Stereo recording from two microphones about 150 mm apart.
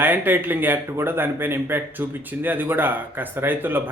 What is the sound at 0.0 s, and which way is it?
Speech, 10° right (ahead or behind).